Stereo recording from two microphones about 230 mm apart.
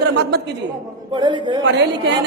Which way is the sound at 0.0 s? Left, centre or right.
Right.